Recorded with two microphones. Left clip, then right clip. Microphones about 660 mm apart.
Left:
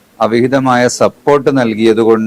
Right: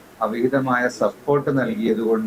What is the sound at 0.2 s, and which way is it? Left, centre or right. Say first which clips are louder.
Speech: left 10 dB; left.